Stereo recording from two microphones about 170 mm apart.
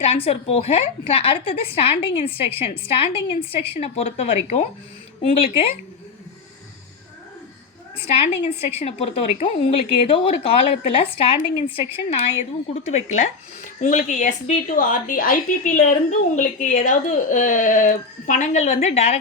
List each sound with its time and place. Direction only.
0.0 s a woman's voice: 35° left (ahead or behind)
8.1 s a woman's voice: 35° left (ahead or behind)